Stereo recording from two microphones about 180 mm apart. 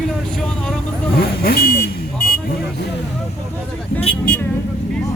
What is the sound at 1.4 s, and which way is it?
Speech, 60° left (ahead or behind).